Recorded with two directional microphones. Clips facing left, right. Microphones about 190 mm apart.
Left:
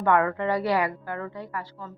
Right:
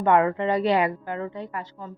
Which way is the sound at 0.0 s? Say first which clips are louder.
Right 2 dB; 20° right (ahead or behind).